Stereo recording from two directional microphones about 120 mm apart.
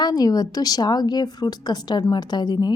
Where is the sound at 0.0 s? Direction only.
35° left (ahead or behind).